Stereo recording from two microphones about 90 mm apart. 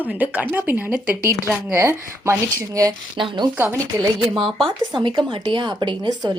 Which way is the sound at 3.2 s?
60° right (ahead or behind).